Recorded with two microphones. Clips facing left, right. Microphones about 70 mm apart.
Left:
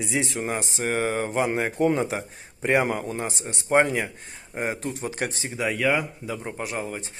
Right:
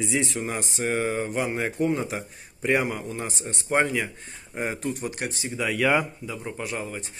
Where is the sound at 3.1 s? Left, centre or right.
Left.